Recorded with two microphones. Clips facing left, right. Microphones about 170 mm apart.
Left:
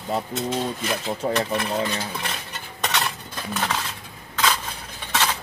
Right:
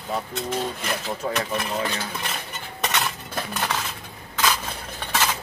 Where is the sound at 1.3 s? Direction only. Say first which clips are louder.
Left 3 dB; centre (ahead or behind).